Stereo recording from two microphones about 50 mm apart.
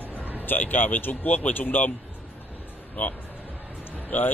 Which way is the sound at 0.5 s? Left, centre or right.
Left.